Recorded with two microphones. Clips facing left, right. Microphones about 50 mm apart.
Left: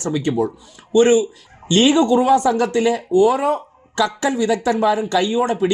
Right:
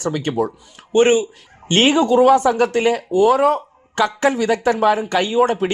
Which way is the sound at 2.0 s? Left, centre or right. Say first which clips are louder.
Right 2 dB; right.